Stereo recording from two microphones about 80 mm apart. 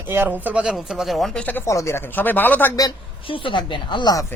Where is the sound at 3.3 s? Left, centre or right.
Left.